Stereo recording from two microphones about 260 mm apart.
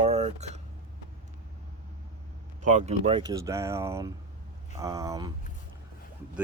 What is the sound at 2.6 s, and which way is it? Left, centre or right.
Speech, right.